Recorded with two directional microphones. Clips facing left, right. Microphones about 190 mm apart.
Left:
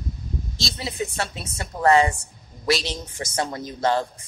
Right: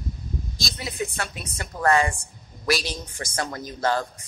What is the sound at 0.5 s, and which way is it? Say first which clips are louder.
A woman's voice: left 4 dB; 25° left (ahead or behind).